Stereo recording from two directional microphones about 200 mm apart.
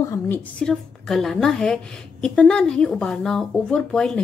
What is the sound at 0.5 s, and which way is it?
Speech, centre (ahead or behind).